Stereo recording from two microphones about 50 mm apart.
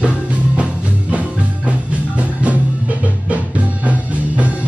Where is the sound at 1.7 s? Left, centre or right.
Right.